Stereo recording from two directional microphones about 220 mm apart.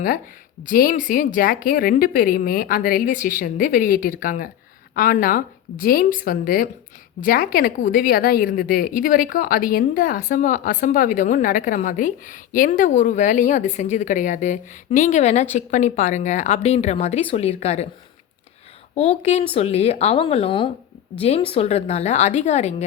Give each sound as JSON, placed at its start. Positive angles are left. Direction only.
{"t": 0.6, "sound": "a woman's voice", "side_deg": 40}
{"t": 18.9, "sound": "speech", "side_deg": 30}